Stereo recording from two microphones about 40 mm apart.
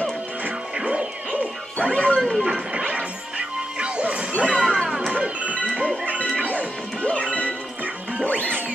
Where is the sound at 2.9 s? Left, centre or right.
Right.